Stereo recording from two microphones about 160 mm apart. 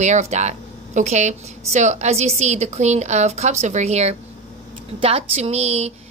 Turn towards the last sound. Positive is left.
turn(degrees=-40)  # may be behind; listen again after turning